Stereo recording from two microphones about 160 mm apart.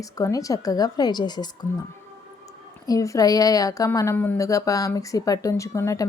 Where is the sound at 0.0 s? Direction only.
20° left (ahead or behind).